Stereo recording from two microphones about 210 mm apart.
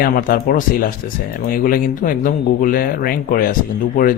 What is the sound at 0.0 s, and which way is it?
Speech, 40° left (ahead or behind).